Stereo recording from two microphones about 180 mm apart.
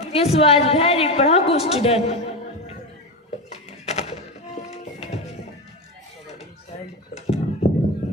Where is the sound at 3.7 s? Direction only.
35° left (ahead or behind).